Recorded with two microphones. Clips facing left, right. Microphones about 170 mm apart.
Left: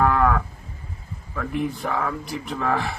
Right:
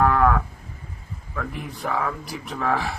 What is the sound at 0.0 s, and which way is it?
Moo, centre (ahead or behind).